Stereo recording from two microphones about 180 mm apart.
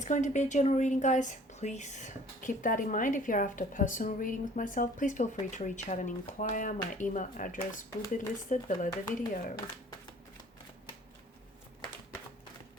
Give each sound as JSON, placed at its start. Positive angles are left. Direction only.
{"t": 0.0, "sound": "a woman's voice", "side_deg": 40}